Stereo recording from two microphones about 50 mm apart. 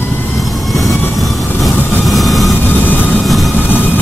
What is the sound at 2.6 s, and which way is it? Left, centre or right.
Vehicle, left.